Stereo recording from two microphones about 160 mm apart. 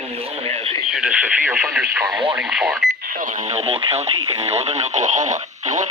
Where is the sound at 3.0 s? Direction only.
60° right (ahead or behind).